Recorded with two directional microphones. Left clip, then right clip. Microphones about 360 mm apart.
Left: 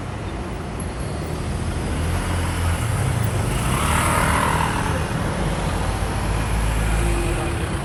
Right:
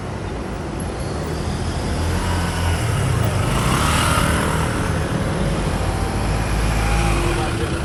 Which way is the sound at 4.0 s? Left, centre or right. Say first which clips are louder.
Even; centre.